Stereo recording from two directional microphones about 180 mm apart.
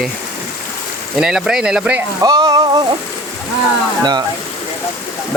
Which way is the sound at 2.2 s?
20° right (ahead or behind).